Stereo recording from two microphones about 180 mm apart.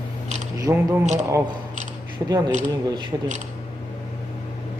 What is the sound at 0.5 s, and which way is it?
Speech, 15° right (ahead or behind).